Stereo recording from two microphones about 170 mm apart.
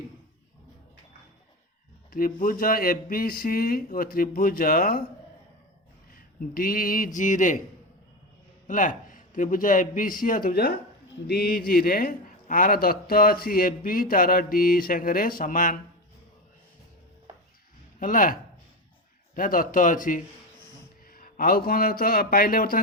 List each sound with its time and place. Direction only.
2.0 s a man's voice: 55° left (ahead or behind)
6.4 s a man's voice: 55° left (ahead or behind)
8.6 s a man's voice: 50° left (ahead or behind)
18.0 s a man's voice: 55° left (ahead or behind)
19.4 s a man's voice: 55° left (ahead or behind)